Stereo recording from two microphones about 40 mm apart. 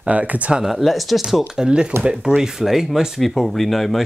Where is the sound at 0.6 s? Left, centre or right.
Centre.